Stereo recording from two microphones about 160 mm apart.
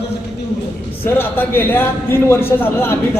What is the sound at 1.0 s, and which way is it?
A man's voice, 15° left (ahead or behind).